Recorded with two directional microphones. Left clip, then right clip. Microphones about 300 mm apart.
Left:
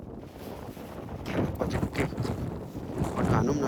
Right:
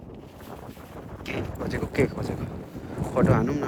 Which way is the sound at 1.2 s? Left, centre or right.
Centre.